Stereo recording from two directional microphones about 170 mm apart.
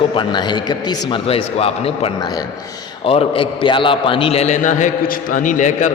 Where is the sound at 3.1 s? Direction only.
35° left (ahead or behind).